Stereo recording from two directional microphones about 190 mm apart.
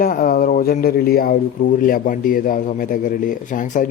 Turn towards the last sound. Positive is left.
turn(degrees=45)  # may be behind; listen again after turning